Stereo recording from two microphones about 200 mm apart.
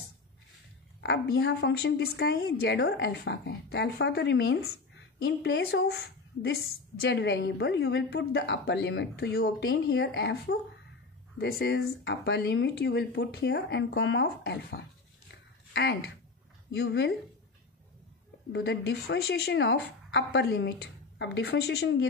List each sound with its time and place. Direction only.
1.0 s a woman's voice: 55° left (ahead or behind)
15.3 s a sound: 55° left (ahead or behind)
16.8 s a woman's voice: 55° left (ahead or behind)
18.5 s a woman's voice: 55° left (ahead or behind)